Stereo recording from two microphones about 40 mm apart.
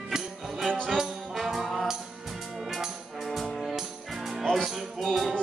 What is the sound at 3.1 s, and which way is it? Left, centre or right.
Music, centre.